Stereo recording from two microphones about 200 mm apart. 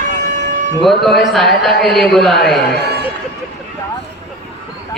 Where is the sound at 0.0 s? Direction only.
40° right (ahead or behind).